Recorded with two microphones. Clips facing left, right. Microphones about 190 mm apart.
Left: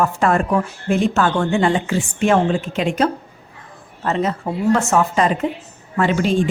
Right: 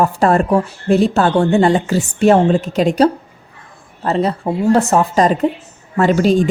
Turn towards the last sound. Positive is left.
turn(degrees=-40)  # may be behind; listen again after turning